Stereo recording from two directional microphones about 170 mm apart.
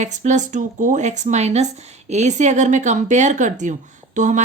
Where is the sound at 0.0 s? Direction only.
45° right (ahead or behind).